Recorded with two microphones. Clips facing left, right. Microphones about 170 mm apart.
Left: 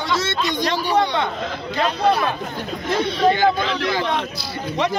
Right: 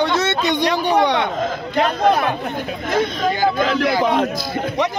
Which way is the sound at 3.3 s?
45° right (ahead or behind).